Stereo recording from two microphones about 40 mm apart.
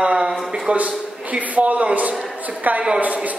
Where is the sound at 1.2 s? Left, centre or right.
Right.